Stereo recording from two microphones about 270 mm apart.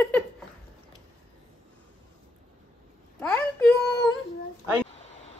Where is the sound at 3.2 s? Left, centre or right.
Centre.